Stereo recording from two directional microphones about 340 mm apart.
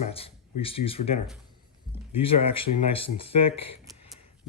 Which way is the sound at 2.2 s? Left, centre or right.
Centre.